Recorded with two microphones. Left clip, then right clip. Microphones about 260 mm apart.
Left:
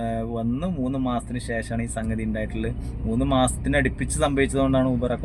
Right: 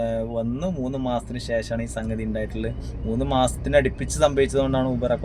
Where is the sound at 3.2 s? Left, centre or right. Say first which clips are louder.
Even; right.